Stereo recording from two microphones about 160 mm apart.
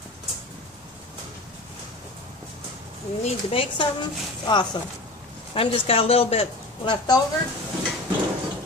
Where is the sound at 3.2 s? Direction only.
35° left (ahead or behind).